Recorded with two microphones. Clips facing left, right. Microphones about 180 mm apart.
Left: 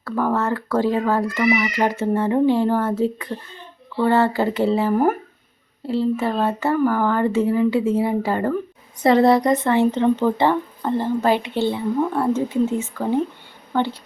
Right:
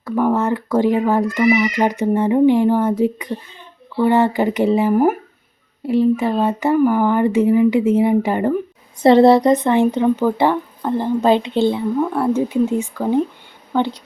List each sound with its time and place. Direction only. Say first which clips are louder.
0.0 s speech: right 4 dB; 15° right (ahead or behind)